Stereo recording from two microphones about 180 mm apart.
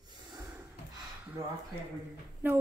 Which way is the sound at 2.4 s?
10° right (ahead or behind).